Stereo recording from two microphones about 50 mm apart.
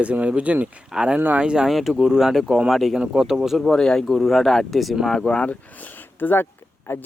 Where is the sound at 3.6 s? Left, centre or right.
Centre.